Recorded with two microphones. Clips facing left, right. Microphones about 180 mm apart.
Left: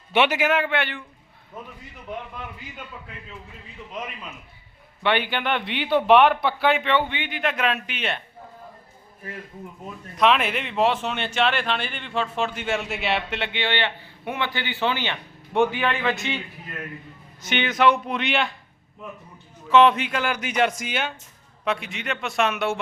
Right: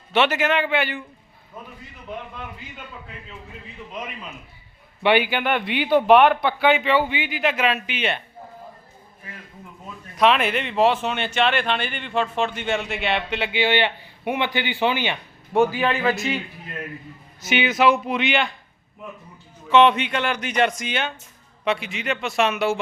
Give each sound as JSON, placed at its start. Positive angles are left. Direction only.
{"t": 0.1, "sound": "speech", "side_deg": 10}
{"t": 5.0, "sound": "speech", "side_deg": -10}
{"t": 10.2, "sound": "speech", "side_deg": 0}
{"t": 16.0, "sound": "a man's voice", "side_deg": -35}
{"t": 17.4, "sound": "speech", "side_deg": -5}
{"t": 19.6, "sound": "speech", "side_deg": 0}